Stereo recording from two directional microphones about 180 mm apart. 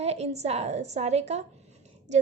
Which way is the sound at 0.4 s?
35° right (ahead or behind).